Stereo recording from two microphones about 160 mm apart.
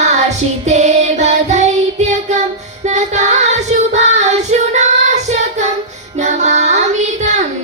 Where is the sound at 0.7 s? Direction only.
45° right (ahead or behind).